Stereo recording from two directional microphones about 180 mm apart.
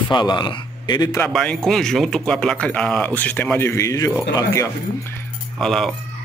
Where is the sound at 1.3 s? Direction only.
5° left (ahead or behind).